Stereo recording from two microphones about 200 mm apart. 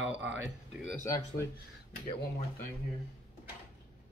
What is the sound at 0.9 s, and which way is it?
Speech, 15° left (ahead or behind).